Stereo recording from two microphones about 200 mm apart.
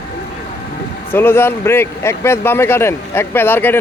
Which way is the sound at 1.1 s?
10° left (ahead or behind).